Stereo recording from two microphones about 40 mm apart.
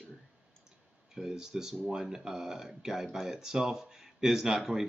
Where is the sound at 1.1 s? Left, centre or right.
Centre.